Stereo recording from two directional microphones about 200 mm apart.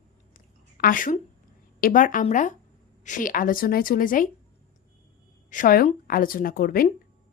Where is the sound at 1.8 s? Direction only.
40° left (ahead or behind).